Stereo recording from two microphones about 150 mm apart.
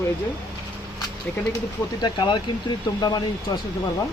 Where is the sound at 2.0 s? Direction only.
30° left (ahead or behind).